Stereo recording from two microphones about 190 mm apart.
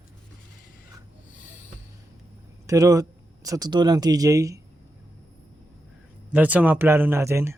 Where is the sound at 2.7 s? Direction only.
20° right (ahead or behind).